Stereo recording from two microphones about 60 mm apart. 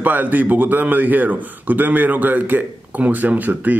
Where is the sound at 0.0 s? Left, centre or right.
Right.